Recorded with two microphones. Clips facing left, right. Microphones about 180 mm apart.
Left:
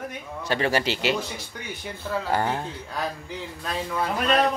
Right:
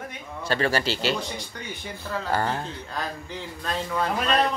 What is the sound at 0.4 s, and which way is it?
Speech, 15° left (ahead or behind).